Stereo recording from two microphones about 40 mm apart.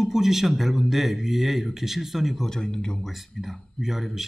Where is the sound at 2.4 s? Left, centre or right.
Centre.